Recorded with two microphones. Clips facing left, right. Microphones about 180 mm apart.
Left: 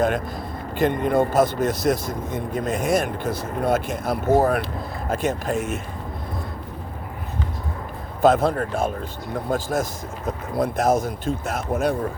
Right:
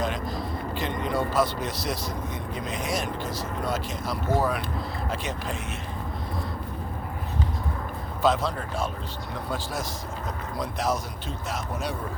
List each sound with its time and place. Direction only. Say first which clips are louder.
0.0 s a man's voice: left 6 dB; 55° left (ahead or behind)
8.2 s a man's voice: left 7 dB; 50° left (ahead or behind)